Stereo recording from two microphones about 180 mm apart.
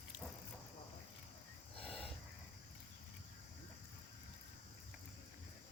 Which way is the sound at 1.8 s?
5° left (ahead or behind).